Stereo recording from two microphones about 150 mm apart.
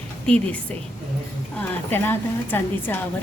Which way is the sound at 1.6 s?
15° left (ahead or behind).